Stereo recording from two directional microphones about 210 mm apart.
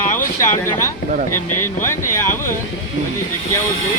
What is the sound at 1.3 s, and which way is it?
Speech, 90° left.